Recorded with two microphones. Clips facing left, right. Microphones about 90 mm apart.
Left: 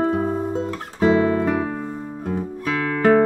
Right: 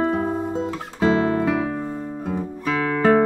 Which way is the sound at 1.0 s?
Centre (ahead or behind).